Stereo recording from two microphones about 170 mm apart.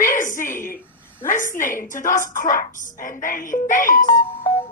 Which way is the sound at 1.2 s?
50° left (ahead or behind).